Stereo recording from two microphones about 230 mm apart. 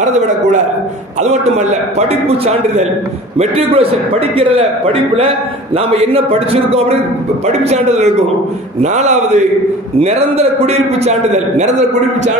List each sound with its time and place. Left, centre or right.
1.2 s a man's voice: right